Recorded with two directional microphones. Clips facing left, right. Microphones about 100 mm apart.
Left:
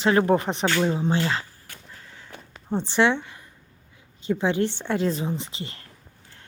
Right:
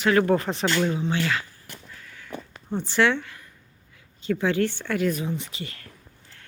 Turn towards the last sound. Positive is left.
turn(degrees=25)  # may be behind; listen again after turning